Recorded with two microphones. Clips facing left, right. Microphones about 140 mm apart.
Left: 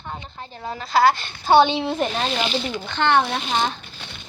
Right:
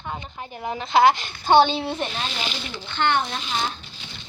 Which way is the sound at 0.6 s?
20° right (ahead or behind).